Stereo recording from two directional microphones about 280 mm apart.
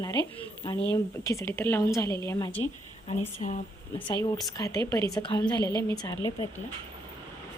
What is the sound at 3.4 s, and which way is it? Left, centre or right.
Speech, left.